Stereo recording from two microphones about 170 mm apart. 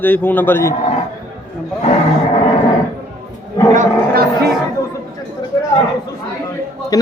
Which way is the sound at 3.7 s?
45° right (ahead or behind).